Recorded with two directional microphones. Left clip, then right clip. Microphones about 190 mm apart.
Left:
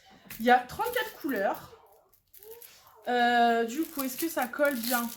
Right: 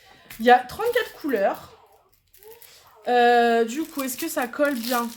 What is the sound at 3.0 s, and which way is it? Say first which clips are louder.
Speech: right 6 dB; 50° right (ahead or behind).